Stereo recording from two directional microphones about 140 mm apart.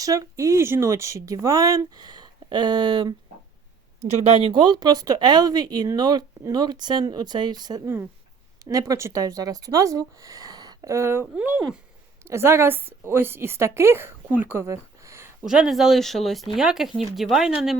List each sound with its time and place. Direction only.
0.0 s speech: 25° right (ahead or behind)
4.1 s a woman's voice: 45° right (ahead or behind); by 15.3 s 20° right (ahead or behind)
15.4 s speech: 5° right (ahead or behind)